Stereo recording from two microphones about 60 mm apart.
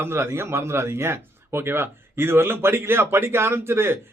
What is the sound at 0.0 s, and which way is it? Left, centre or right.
Speech, right.